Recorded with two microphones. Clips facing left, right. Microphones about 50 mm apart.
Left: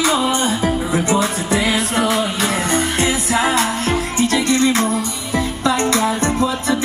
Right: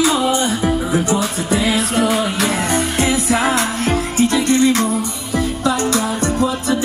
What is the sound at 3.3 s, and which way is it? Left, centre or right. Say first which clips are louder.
Music: even; right.